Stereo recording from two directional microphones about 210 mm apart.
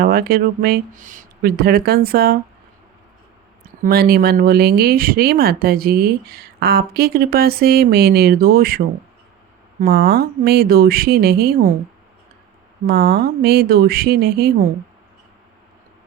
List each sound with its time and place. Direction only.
0.0 s speech: 45° right (ahead or behind)
3.8 s speech: 50° right (ahead or behind)
9.8 s speech: 45° right (ahead or behind)
12.9 s speech: 45° right (ahead or behind)